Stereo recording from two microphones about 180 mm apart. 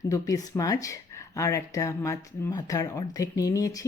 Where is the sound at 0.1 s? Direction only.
20° left (ahead or behind).